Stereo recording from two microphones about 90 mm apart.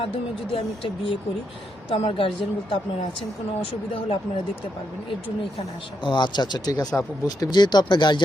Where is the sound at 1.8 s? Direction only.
90° left.